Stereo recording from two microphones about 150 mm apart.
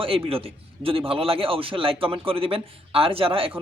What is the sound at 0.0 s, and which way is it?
A woman's voice, 40° right (ahead or behind).